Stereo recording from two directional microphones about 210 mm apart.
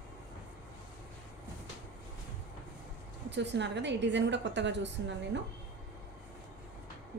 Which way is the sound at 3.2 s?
55° right (ahead or behind).